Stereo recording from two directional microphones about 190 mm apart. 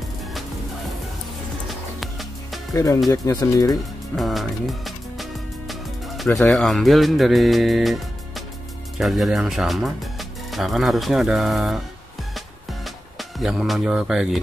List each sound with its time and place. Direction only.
2.0 s music: centre (ahead or behind)
2.7 s speech: 15° left (ahead or behind)
4.1 s music: centre (ahead or behind)
8.9 s speech: centre (ahead or behind)
12.4 s music: centre (ahead or behind)